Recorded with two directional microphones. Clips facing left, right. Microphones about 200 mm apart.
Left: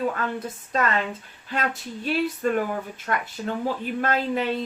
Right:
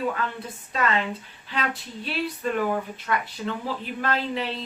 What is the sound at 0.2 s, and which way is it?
Speech, 45° left (ahead or behind).